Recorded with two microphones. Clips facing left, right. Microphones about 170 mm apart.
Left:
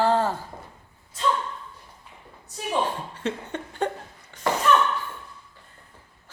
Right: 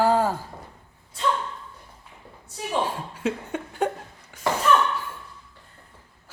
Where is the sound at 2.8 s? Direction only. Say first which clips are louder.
Right 1 dB; 10° right (ahead or behind).